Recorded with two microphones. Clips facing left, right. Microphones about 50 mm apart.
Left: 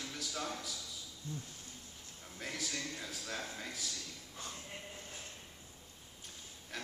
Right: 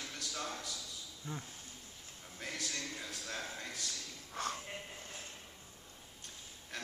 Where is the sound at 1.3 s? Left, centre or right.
Right.